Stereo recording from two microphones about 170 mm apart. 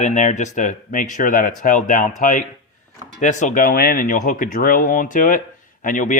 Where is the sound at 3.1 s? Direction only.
45° left (ahead or behind).